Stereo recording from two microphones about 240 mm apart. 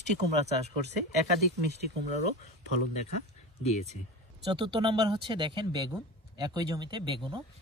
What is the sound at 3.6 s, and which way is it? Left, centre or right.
Speech, left.